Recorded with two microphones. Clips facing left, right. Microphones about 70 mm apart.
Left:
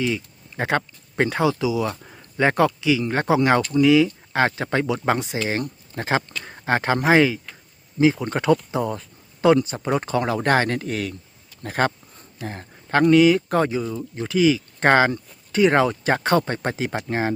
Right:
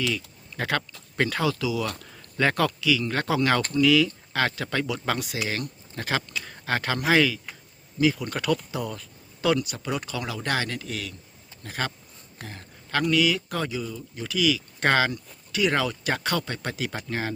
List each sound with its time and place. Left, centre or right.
0.1 s speech: left